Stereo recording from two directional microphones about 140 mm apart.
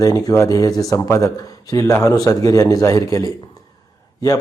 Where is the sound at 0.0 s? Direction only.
25° left (ahead or behind).